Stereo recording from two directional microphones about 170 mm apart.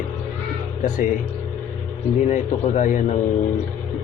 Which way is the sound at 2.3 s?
45° left (ahead or behind).